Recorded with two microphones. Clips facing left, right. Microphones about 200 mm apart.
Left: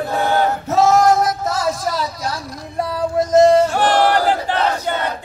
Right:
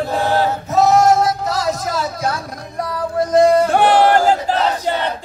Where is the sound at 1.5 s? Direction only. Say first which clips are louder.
Even; 40° right (ahead or behind).